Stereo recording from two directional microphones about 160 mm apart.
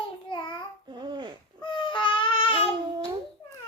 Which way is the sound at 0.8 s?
30° right (ahead or behind).